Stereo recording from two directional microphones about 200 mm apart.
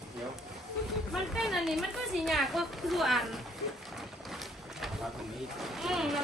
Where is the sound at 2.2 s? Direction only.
Centre (ahead or behind).